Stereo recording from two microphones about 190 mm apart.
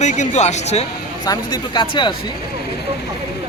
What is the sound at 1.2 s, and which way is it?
Speech, 20° left (ahead or behind).